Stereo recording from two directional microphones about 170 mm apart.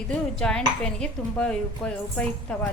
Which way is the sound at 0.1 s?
5° left (ahead or behind).